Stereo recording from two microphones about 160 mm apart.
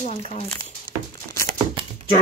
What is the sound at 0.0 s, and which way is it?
Speech, 45° left (ahead or behind).